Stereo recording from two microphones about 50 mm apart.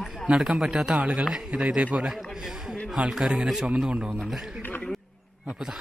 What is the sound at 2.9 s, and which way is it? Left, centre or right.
Speech, centre.